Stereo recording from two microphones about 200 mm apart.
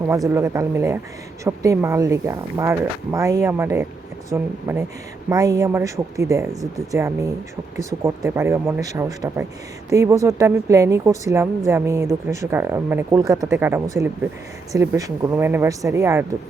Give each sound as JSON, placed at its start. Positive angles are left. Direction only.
{"t": 0.3, "sound": "a woman's voice", "side_deg": -15}